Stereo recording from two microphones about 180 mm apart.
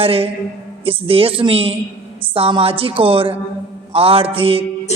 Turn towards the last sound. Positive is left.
turn(degrees=-30)  # may be behind; listen again after turning